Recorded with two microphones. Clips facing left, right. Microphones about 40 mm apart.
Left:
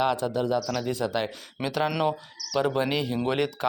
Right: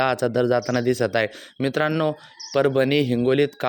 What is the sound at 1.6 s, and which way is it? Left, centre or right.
Speech, right.